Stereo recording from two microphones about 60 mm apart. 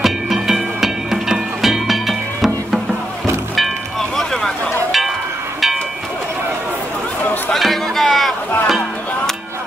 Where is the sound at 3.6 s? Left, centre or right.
Centre.